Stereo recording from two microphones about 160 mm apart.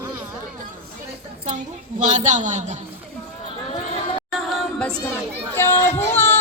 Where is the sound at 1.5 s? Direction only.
50° right (ahead or behind).